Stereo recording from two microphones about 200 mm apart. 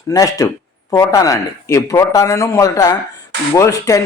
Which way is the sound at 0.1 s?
15° left (ahead or behind).